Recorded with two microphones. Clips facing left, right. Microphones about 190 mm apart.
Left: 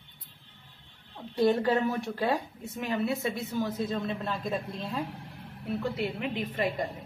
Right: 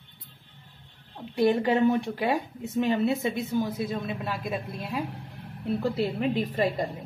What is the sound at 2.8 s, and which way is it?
Speech, 25° right (ahead or behind).